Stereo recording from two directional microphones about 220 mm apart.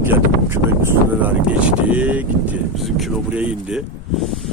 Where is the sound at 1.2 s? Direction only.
5° right (ahead or behind).